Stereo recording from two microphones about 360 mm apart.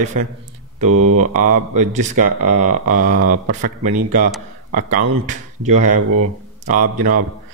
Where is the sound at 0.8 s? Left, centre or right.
Right.